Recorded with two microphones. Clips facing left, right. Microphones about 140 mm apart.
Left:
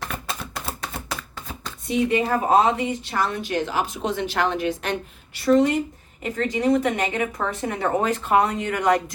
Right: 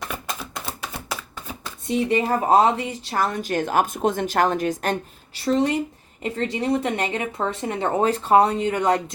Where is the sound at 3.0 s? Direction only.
45° right (ahead or behind).